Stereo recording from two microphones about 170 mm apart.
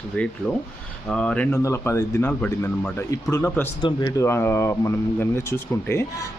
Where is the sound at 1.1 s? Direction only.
5° left (ahead or behind).